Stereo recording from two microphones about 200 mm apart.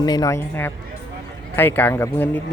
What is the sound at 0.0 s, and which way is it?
A man's voice, 20° left (ahead or behind).